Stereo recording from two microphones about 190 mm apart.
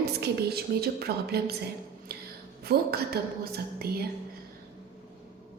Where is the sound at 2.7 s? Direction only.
55° right (ahead or behind).